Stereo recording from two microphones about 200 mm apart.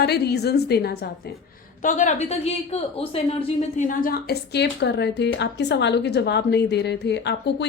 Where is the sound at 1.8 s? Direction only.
40° left (ahead or behind).